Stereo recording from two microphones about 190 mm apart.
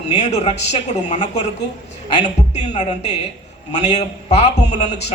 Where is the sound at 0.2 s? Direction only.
35° left (ahead or behind).